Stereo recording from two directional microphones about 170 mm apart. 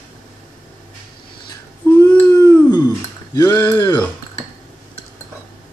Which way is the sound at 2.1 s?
20° left (ahead or behind).